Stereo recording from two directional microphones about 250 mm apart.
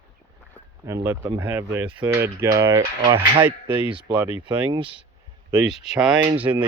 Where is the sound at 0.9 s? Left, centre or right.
Centre.